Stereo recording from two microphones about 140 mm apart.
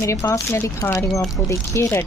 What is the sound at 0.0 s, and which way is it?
Speech, 20° left (ahead or behind).